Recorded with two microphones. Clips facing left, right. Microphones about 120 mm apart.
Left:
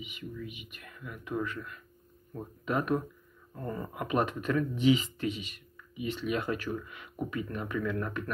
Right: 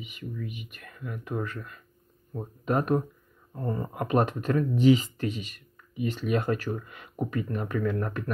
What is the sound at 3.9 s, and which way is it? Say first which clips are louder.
Speech: right 4 dB; 40° right (ahead or behind).